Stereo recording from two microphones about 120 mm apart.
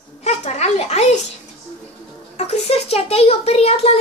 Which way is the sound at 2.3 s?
60° left (ahead or behind).